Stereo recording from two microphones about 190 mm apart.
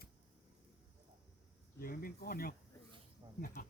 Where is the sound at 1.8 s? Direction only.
50° left (ahead or behind).